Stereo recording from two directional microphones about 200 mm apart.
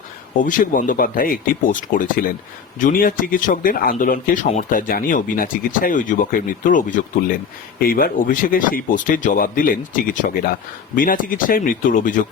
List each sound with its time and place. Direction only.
0.4 s speech: 40° left (ahead or behind)